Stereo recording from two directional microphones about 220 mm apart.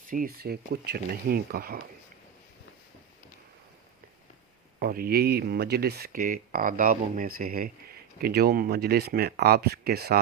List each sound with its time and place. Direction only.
0.1 s speech: 40° right (ahead or behind)
4.8 s speech: 40° right (ahead or behind)